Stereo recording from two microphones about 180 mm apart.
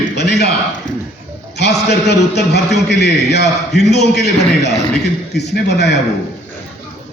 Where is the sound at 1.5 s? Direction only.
70° left (ahead or behind).